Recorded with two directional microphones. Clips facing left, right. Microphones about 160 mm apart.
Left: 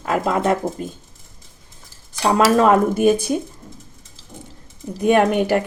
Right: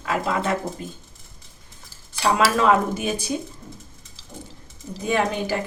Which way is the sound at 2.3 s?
45° left (ahead or behind).